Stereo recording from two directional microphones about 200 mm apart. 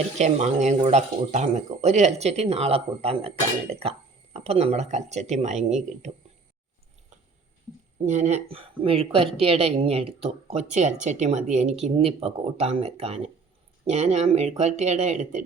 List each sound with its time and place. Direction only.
0.2 s speech: 35° right (ahead or behind)
8.0 s speech: 35° right (ahead or behind)